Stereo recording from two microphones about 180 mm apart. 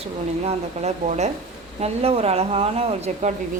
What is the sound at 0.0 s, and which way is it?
Speech, 35° right (ahead or behind).